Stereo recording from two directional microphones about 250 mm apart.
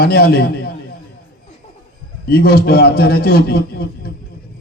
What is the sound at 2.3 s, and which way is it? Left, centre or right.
A man's voice, left.